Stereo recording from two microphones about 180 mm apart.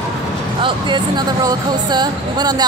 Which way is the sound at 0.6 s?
25° right (ahead or behind).